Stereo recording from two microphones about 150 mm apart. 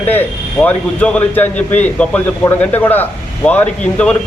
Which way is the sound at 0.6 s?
10° left (ahead or behind).